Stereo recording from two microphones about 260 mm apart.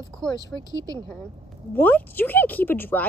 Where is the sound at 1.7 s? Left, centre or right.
Centre.